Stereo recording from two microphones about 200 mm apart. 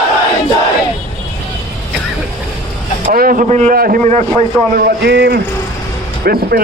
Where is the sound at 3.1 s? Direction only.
45° right (ahead or behind).